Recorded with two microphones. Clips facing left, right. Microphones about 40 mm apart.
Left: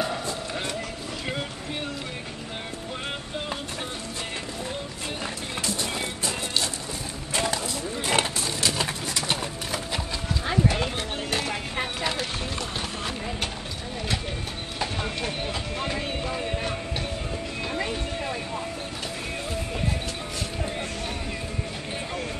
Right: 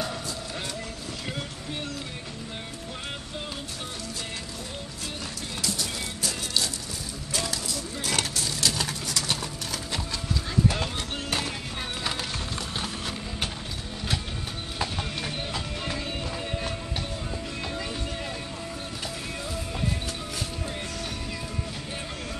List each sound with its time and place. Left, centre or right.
5.6 s music: left
7.3 s horse: left
10.4 s clip-clop: left
10.7 s clip-clop: centre
14.8 s clip-clop: centre
16.0 s music: left